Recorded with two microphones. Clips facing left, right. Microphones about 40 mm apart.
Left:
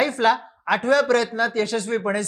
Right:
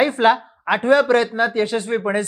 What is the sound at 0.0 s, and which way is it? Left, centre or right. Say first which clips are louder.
Speech: right 4 dB; right.